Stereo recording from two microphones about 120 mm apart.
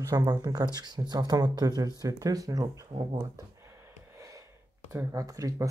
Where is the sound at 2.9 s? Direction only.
45° right (ahead or behind).